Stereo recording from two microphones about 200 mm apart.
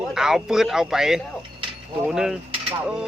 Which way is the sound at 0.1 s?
Centre (ahead or behind).